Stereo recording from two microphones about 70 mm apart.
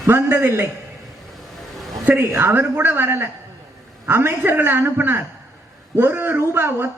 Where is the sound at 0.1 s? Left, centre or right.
Right.